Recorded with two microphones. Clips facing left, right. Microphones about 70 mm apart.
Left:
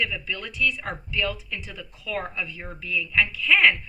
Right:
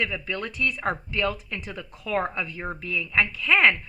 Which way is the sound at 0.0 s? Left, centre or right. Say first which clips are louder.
Right 1 dB; right.